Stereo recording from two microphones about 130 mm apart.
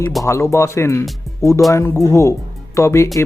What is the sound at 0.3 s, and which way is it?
Speech, 20° left (ahead or behind).